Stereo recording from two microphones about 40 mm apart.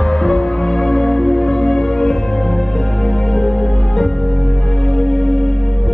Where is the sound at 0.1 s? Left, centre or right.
Centre.